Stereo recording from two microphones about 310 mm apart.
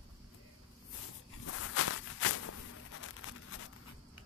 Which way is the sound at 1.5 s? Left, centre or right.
Left.